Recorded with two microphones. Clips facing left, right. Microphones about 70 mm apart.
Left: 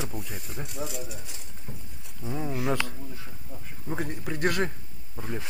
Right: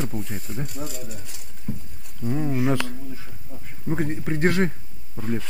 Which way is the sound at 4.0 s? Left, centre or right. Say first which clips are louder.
Right 5 dB; right.